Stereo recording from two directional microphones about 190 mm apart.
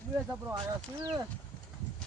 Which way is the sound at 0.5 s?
25° right (ahead or behind).